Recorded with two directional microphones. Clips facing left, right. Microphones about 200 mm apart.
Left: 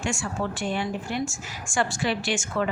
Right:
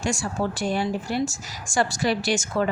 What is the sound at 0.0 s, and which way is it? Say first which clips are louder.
A woman's voice: right 3 dB; 40° right (ahead or behind).